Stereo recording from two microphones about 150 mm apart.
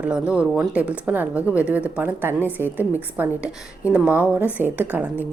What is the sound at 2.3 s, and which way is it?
Speech, 10° left (ahead or behind).